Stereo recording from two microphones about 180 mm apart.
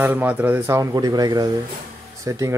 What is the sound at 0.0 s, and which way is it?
A man's voice, 10° right (ahead or behind).